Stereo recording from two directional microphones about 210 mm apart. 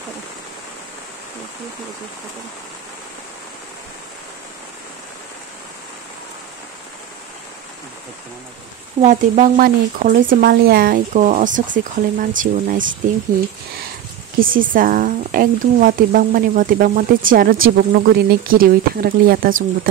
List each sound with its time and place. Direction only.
9.0 s speech: 35° right (ahead or behind)
14.4 s speech: 40° right (ahead or behind)